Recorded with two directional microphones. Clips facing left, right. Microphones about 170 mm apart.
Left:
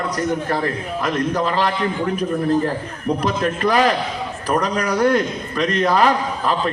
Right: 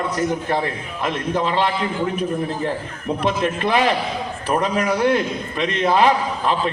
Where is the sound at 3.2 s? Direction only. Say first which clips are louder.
Right 2 dB; 40° left (ahead or behind).